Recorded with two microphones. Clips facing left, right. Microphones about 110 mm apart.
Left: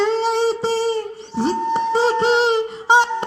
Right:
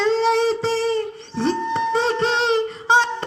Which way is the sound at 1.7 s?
25° left (ahead or behind).